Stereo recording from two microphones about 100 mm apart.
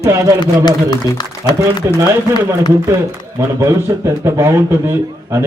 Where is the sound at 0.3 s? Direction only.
45° left (ahead or behind).